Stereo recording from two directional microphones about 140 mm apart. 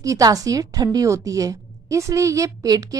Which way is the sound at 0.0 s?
25° right (ahead or behind).